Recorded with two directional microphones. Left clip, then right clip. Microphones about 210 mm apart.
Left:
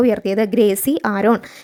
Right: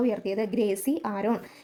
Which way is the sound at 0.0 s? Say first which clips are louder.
Left 11 dB; 35° left (ahead or behind).